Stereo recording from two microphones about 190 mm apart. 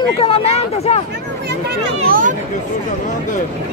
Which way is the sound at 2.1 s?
45° right (ahead or behind).